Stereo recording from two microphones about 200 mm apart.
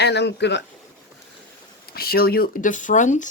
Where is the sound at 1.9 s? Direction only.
50° left (ahead or behind).